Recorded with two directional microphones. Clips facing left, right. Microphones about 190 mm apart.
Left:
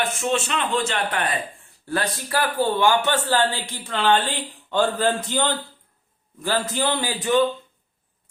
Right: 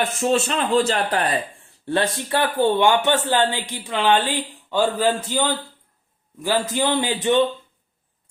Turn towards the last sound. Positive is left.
turn(degrees=-25)  # may be behind; listen again after turning